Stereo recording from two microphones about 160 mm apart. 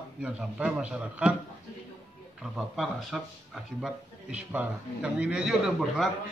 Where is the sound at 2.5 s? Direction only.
Centre (ahead or behind).